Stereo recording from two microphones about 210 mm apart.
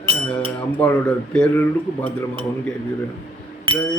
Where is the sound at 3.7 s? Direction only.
25° right (ahead or behind).